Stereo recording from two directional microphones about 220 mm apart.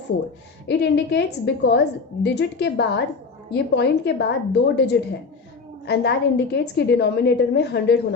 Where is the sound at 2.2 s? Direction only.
50° left (ahead or behind).